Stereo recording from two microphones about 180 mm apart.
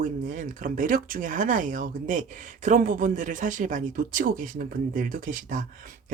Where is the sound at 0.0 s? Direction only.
45° right (ahead or behind).